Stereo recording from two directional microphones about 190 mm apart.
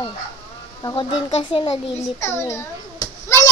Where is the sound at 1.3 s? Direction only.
35° left (ahead or behind).